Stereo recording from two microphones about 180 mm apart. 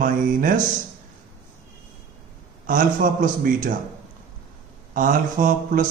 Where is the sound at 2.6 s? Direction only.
50° right (ahead or behind).